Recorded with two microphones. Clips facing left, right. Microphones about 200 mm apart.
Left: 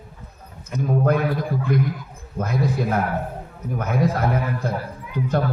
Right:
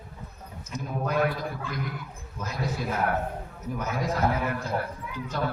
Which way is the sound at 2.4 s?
60° left (ahead or behind).